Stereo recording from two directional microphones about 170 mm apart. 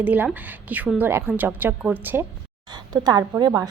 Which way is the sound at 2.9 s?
25° right (ahead or behind).